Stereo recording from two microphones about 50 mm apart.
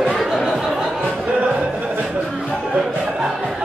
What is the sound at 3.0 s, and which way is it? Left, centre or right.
Music, centre.